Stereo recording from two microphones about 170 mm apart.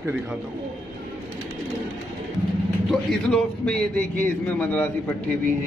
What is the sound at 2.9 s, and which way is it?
Speech, centre (ahead or behind).